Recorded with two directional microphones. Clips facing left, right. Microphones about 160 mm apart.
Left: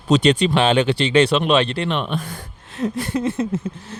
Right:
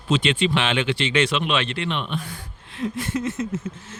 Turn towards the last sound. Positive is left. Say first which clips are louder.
# left 4 dB
turn(degrees=30)  # may be behind; listen again after turning